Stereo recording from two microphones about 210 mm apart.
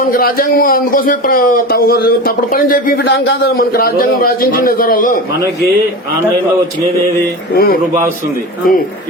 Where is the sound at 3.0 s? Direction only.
60° left (ahead or behind); by 5.2 s 40° left (ahead or behind).